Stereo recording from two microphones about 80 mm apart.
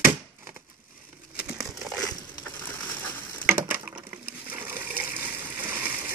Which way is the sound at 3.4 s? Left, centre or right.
Right.